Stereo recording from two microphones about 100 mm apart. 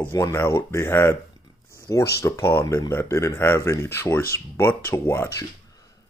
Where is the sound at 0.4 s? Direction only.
25° left (ahead or behind).